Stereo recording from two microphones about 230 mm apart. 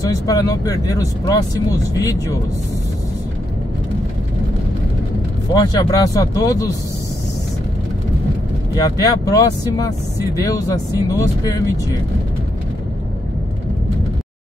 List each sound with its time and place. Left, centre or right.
0.0 s speech: centre
5.5 s speech: centre
8.7 s speech: centre